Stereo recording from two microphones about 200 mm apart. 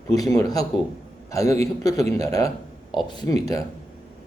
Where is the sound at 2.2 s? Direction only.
15° left (ahead or behind).